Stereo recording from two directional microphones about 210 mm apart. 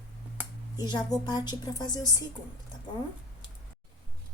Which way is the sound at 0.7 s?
20° left (ahead or behind).